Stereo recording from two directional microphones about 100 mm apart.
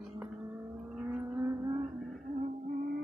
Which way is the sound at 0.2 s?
25° right (ahead or behind).